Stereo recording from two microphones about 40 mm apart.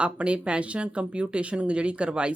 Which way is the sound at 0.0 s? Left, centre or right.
Right.